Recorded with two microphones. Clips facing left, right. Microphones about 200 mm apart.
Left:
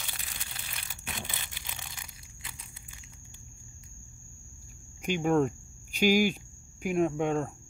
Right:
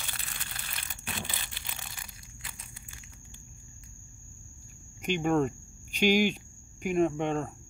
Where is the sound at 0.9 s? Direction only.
15° left (ahead or behind).